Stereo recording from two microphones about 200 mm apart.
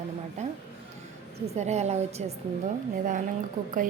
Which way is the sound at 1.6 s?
35° right (ahead or behind).